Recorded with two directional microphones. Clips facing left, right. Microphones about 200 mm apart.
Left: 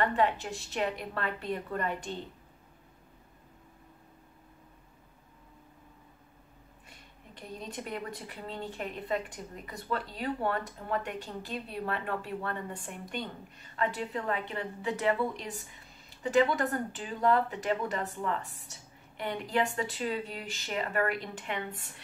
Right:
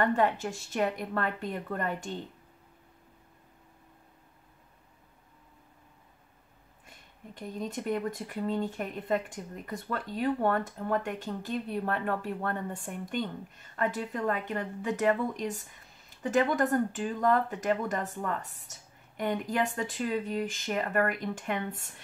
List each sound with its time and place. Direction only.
0.0 s speech: 45° right (ahead or behind)
7.3 s speech: 45° right (ahead or behind)